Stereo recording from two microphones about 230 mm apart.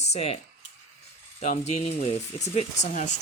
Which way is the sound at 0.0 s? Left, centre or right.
Left.